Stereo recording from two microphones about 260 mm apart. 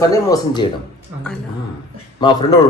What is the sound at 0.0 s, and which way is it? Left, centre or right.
Speech, centre.